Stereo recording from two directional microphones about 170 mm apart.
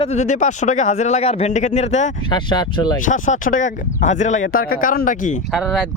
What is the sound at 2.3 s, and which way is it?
Speech, 25° left (ahead or behind).